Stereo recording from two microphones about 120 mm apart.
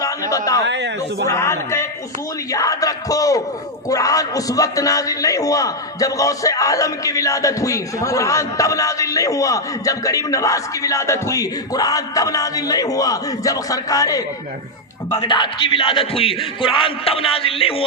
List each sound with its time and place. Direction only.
0.0 s a man's voice: 30° left (ahead or behind); by 17.8 s 50° left (ahead or behind)